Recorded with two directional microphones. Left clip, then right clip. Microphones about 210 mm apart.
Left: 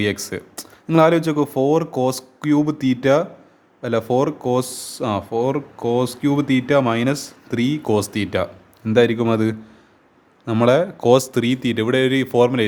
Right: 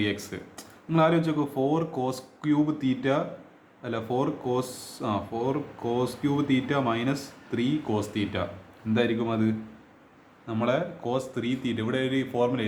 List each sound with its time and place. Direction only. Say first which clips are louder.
0.0 s speech: left 7 dB; 50° left (ahead or behind)